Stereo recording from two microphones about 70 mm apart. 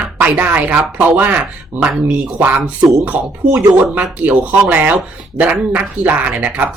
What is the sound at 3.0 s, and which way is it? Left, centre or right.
Speech, right.